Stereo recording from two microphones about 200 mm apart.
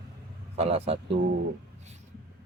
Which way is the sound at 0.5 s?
30° right (ahead or behind).